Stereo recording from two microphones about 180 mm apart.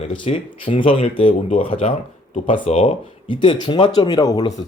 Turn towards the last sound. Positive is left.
turn(degrees=25)  # may be behind; listen again after turning